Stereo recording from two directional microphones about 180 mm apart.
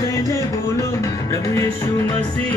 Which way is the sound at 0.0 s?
20° left (ahead or behind).